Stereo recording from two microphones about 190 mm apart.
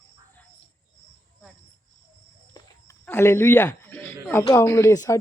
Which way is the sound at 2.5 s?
15° left (ahead or behind).